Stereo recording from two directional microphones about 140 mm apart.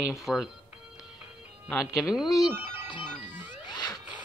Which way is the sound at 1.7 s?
20° left (ahead or behind).